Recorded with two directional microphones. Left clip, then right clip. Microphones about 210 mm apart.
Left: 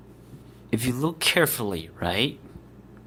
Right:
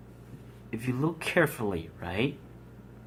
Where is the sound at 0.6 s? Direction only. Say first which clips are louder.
Left 5 dB; 50° left (ahead or behind).